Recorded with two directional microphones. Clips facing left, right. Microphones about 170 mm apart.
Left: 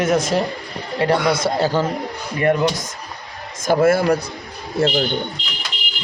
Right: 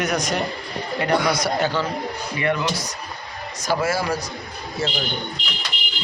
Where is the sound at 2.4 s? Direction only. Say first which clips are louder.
Left 6 dB; 45° left (ahead or behind).